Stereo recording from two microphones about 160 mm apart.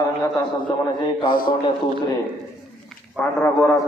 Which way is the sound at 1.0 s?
30° left (ahead or behind).